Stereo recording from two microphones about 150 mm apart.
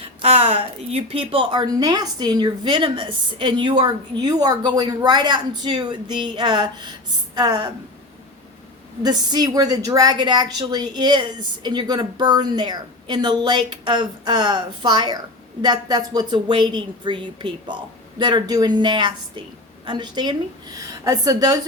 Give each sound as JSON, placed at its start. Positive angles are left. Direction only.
{"t": 0.0, "sound": "a woman's voice", "side_deg": -40}
{"t": 9.0, "sound": "a woman's voice", "side_deg": -30}